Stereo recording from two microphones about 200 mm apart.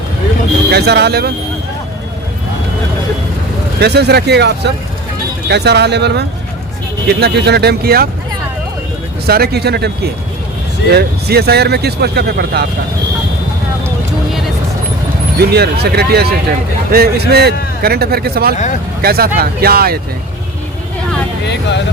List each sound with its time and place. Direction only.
0.7 s speech: 55° right (ahead or behind)
3.8 s speech: 55° right (ahead or behind)
9.2 s speech: 50° right (ahead or behind)
15.4 s speech: 50° right (ahead or behind)
21.4 s vehicle: 60° left (ahead or behind)